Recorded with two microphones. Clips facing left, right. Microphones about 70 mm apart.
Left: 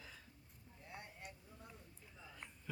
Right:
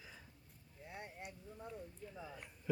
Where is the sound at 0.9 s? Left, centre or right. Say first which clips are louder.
Right 4 dB; right.